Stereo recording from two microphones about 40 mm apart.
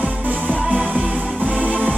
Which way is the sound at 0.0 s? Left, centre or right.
Right.